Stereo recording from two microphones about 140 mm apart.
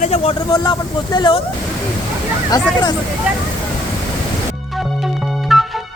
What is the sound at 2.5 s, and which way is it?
Speech, 25° left (ahead or behind).